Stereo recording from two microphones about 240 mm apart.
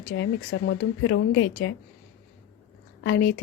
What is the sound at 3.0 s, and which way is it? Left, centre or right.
Speech, left.